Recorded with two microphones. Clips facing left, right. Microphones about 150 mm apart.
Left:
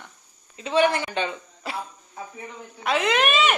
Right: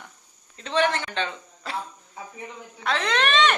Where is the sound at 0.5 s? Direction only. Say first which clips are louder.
Left 3 dB; 10° left (ahead or behind).